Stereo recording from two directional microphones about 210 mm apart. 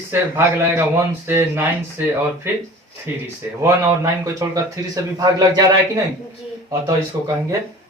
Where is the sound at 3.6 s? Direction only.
15° right (ahead or behind).